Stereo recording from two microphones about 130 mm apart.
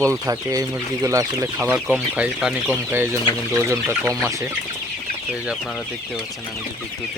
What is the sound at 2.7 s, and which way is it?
Speech, 20° right (ahead or behind).